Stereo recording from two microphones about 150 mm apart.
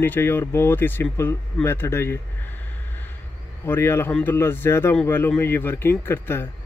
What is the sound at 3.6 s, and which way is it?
Speech, 15° left (ahead or behind).